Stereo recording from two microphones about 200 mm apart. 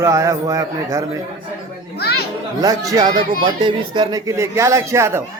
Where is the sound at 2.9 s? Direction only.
20° right (ahead or behind).